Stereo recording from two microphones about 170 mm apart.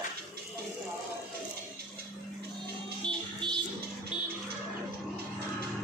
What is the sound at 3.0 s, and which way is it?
Music, 30° right (ahead or behind).